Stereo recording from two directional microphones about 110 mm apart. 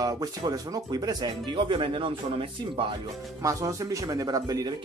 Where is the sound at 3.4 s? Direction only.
30° right (ahead or behind).